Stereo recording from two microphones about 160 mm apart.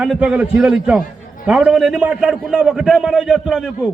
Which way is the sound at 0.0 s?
5° right (ahead or behind).